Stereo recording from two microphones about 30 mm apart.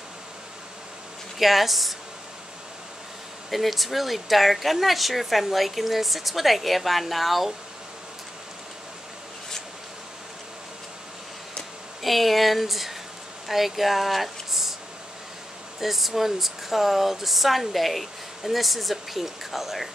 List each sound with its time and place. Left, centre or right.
1.4 s speech: centre
3.4 s speech: centre
12.0 s speech: centre
15.8 s speech: centre